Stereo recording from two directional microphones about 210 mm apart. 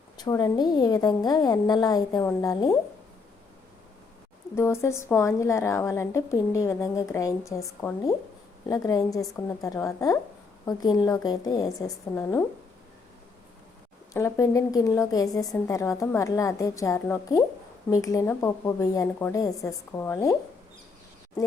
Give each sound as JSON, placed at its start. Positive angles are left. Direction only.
{"t": 0.2, "sound": "a woman's voice", "side_deg": 20}
{"t": 4.5, "sound": "a woman's voice", "side_deg": 10}
{"t": 14.1, "sound": "a woman's voice", "side_deg": 15}